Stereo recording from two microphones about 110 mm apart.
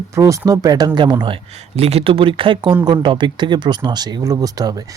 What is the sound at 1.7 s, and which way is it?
Speech, 70° right (ahead or behind).